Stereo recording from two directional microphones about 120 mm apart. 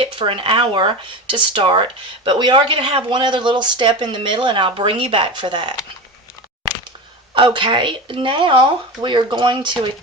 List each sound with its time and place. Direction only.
0.0 s speech: 45° right (ahead or behind)
7.3 s speech: 45° right (ahead or behind)